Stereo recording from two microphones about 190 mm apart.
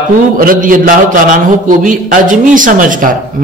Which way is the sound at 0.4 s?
45° right (ahead or behind).